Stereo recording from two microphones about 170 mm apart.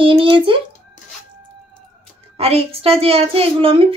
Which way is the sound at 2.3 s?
35° right (ahead or behind).